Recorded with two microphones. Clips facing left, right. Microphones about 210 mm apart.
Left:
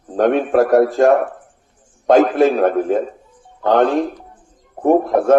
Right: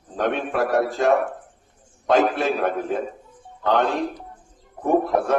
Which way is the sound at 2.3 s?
45° left (ahead or behind).